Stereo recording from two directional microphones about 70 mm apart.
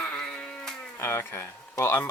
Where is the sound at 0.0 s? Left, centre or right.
Centre.